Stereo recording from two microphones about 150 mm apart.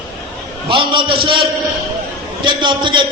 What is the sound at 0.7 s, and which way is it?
A man's voice, 35° right (ahead or behind).